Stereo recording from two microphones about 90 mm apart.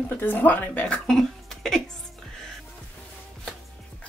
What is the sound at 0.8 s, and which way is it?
Speech, 10° left (ahead or behind).